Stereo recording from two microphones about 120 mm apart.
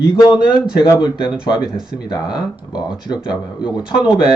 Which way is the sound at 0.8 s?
35° left (ahead or behind).